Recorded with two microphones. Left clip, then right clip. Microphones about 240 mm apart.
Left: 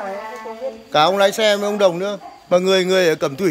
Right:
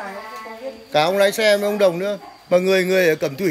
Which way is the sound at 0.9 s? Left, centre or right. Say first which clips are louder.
Left 2 dB; centre.